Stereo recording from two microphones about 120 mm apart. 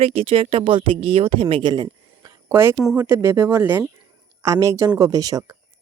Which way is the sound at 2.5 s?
20° right (ahead or behind).